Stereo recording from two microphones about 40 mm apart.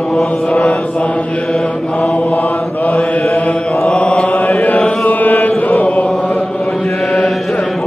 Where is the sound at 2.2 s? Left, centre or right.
Left.